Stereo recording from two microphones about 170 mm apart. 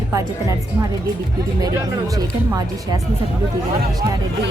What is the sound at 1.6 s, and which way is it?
Speech, 20° right (ahead or behind).